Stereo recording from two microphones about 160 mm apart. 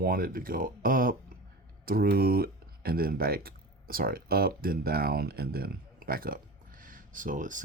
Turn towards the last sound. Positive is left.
turn(degrees=-55)  # may be behind; listen again after turning